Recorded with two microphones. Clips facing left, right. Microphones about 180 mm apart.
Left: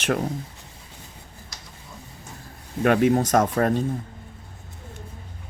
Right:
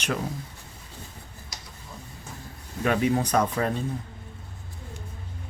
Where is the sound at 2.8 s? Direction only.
55° left (ahead or behind).